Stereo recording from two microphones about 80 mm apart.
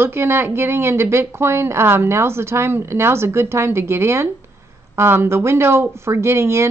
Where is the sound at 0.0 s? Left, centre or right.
Right.